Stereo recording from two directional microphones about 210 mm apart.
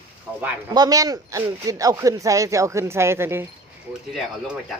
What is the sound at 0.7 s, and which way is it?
Speech, 20° right (ahead or behind).